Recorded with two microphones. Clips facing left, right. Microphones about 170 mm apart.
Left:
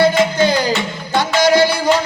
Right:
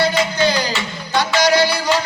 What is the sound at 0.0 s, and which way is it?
Music, 50° left (ahead or behind).